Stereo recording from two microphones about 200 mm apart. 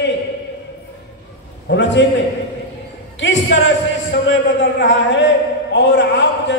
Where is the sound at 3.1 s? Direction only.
70° left (ahead or behind).